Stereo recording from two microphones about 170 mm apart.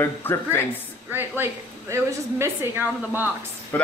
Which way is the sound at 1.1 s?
15° right (ahead or behind).